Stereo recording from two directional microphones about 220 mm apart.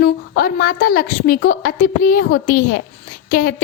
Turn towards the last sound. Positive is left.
turn(degrees=40)  # may be behind; listen again after turning